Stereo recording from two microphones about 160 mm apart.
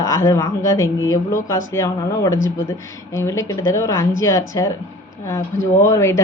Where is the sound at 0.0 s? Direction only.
15° left (ahead or behind).